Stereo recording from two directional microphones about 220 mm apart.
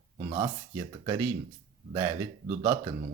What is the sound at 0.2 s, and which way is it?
Speech, 20° right (ahead or behind).